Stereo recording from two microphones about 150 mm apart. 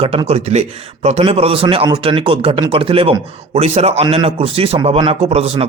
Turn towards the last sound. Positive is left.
turn(degrees=-45)  # may be behind; listen again after turning